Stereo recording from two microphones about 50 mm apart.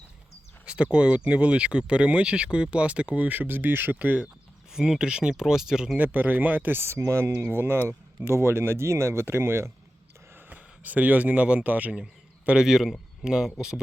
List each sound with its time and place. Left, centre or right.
0.6 s speech: right
3.9 s speech: right
4.7 s speech: centre
6.0 s speech: right
6.9 s speech: right
7.4 s speech: right
7.9 s speech: right
9.2 s speech: right
10.5 s speech: right
12.6 s speech: centre